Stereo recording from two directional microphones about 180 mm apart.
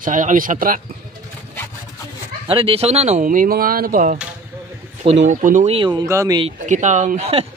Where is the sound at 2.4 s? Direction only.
30° right (ahead or behind).